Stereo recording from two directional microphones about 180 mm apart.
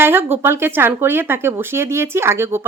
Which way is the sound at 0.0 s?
10° right (ahead or behind).